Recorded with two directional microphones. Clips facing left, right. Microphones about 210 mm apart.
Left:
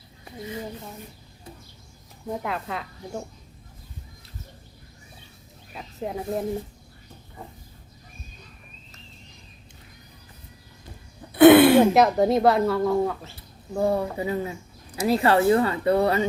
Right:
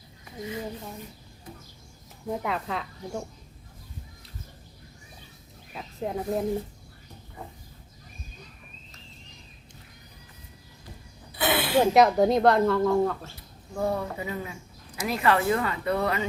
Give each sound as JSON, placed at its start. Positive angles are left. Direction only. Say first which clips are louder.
{"t": 2.3, "sound": "a woman's voice", "louder": "even", "side_deg": 0}
{"t": 5.7, "sound": "speech", "louder": "even", "side_deg": 0}
{"t": 11.3, "sound": "a sound", "louder": "left 14 dB", "side_deg": 55}
{"t": 11.8, "sound": "a woman's voice", "louder": "left 2 dB", "side_deg": 0}
{"t": 13.7, "sound": "speech", "louder": "left 5 dB", "side_deg": 30}